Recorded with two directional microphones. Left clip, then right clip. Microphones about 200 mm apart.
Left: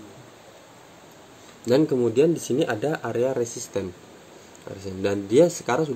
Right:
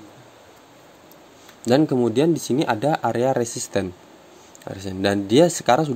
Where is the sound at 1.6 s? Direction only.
40° right (ahead or behind).